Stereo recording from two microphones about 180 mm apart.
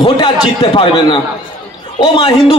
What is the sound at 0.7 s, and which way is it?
A man's voice, 25° left (ahead or behind).